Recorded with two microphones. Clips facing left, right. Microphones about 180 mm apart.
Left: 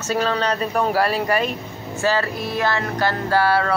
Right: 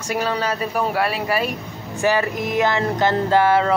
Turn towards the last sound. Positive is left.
turn(degrees=-20)  # may be behind; listen again after turning